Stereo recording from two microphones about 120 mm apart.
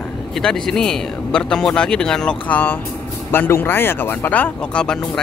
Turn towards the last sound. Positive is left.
turn(degrees=5)  # may be behind; listen again after turning